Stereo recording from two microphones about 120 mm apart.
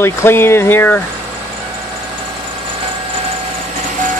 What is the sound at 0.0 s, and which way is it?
Speech, 20° left (ahead or behind).